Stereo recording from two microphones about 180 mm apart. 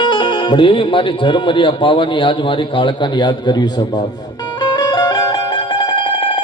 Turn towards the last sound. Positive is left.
turn(degrees=30)  # may be behind; listen again after turning